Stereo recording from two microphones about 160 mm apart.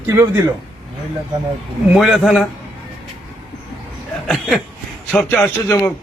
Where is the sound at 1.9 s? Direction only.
Centre (ahead or behind).